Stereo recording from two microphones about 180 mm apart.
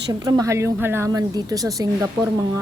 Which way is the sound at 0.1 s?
20° right (ahead or behind).